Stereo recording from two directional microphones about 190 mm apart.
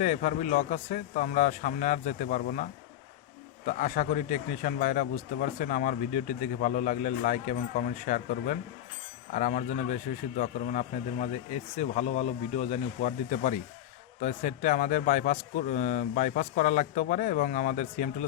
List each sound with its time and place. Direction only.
0.0 s speech: 40° left (ahead or behind)
3.7 s a man's voice: 40° left (ahead or behind)